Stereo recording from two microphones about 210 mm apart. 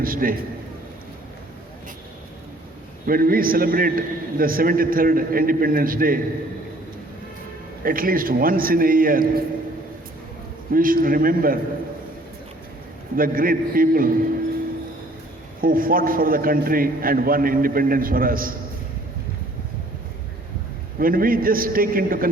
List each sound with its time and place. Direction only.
0.0 s a man's voice: 45° right (ahead or behind)
3.1 s a man's voice: 45° right (ahead or behind)
7.9 s a man's voice: 40° right (ahead or behind)
10.7 s a man's voice: 40° right (ahead or behind)
13.1 s a man's voice: 40° right (ahead or behind)
15.6 s a man's voice: 40° right (ahead or behind)
21.0 s a man's voice: 45° right (ahead or behind)